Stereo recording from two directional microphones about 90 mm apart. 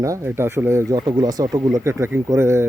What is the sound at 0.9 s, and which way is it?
Speech, 50° right (ahead or behind).